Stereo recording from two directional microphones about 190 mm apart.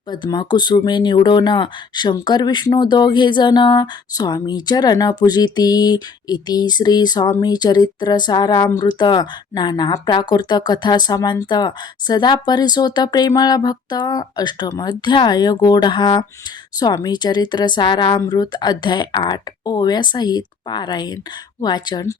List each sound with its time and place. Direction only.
0.1 s speech: 20° left (ahead or behind)